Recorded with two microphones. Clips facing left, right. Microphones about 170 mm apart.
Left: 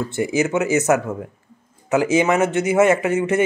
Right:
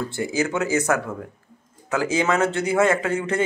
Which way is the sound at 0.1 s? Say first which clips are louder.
Left 6 dB; 20° left (ahead or behind).